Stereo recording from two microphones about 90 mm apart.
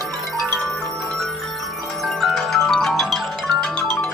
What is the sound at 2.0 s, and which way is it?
Music, centre (ahead or behind).